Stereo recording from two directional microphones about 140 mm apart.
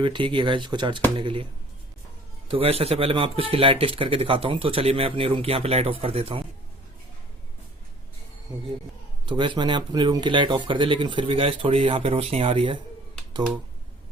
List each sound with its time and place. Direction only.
0.0 s speech: 35° right (ahead or behind)
2.5 s speech: 45° right (ahead or behind)
9.2 s speech: 35° right (ahead or behind)